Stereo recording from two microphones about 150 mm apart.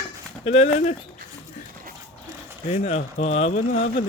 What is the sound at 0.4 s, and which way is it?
Speech, 45° left (ahead or behind).